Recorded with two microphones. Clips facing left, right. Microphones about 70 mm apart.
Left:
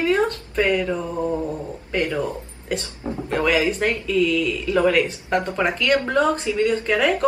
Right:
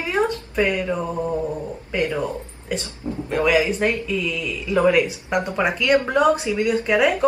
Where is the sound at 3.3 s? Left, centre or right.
Centre.